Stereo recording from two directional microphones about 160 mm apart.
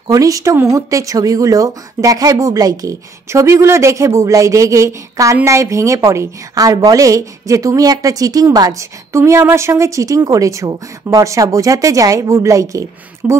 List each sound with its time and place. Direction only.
0.1 s speech: 20° right (ahead or behind)
13.2 s speech: 10° right (ahead or behind)